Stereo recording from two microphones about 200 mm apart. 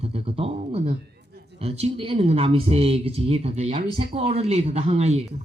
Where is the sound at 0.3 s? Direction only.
30° right (ahead or behind).